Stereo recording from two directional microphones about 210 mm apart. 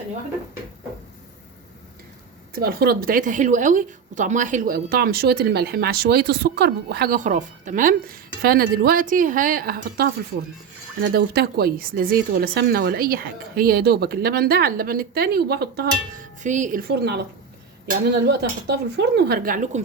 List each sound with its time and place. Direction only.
2.6 s a woman's voice: 45° right (ahead or behind)
11.1 s a woman's voice: 45° right (ahead or behind)